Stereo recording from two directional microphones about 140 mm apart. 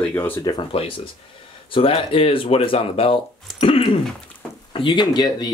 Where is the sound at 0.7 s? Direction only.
40° left (ahead or behind).